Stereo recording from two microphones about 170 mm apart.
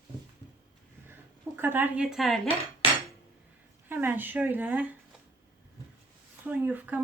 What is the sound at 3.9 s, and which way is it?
Speech, 10° right (ahead or behind).